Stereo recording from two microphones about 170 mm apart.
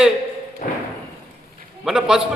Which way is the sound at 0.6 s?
50° left (ahead or behind).